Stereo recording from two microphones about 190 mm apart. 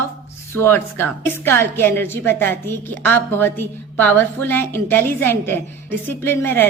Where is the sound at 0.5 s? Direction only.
10° left (ahead or behind).